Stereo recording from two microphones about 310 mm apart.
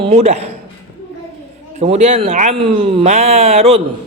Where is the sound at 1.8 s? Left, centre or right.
Right.